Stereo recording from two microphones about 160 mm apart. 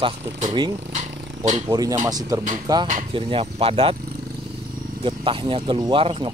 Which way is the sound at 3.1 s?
35° right (ahead or behind).